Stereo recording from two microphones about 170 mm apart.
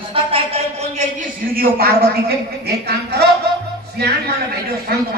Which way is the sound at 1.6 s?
65° right (ahead or behind).